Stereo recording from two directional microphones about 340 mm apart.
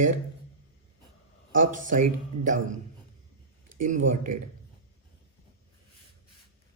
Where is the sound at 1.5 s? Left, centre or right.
Right.